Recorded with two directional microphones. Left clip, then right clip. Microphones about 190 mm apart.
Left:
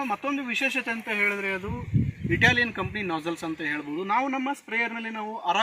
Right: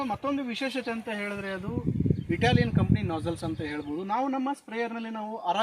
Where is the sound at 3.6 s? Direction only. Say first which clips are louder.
Left 8 dB; 25° right (ahead or behind).